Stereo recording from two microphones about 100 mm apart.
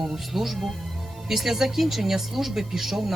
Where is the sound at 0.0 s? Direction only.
Centre (ahead or behind).